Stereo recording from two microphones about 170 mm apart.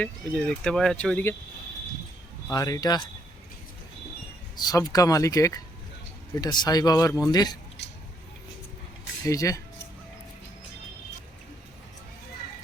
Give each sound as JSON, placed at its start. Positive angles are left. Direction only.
{"t": 0.0, "sound": "speech", "side_deg": 5}
{"t": 2.5, "sound": "speech", "side_deg": 20}
{"t": 4.5, "sound": "speech", "side_deg": 20}
{"t": 9.2, "sound": "speech", "side_deg": 20}